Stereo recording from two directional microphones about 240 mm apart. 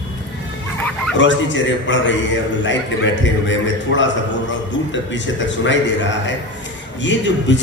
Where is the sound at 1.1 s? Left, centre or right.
Left.